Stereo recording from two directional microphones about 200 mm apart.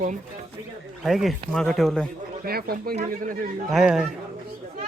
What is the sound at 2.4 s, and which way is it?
Speech, 50° right (ahead or behind).